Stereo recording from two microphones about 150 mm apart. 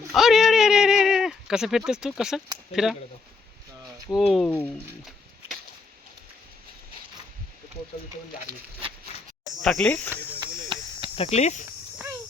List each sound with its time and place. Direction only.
0.1 s a sound: centre (ahead or behind)
2.8 s speech: 5° right (ahead or behind)
4.3 s speech: centre (ahead or behind)
8.8 s a sound: 35° right (ahead or behind)
9.6 s speech: 10° left (ahead or behind)
10.4 s chop: 35° right (ahead or behind)
11.1 s speech: 45° left (ahead or behind)